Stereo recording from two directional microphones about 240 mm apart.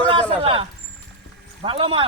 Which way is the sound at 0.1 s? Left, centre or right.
Right.